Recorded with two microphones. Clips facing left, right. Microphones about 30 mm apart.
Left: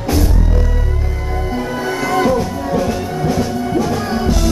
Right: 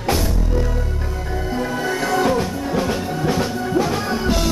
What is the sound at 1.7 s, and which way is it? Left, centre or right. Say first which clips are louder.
Music: left 2 dB; left.